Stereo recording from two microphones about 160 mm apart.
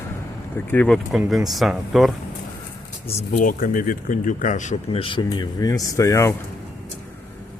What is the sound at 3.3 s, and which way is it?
Speech, 60° left (ahead or behind).